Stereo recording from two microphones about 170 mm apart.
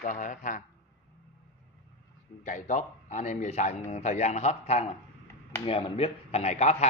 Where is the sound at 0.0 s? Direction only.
50° left (ahead or behind).